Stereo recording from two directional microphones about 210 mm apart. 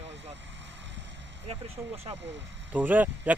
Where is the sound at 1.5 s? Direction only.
25° right (ahead or behind).